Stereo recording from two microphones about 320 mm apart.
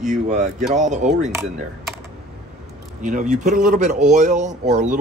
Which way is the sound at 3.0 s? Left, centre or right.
Right.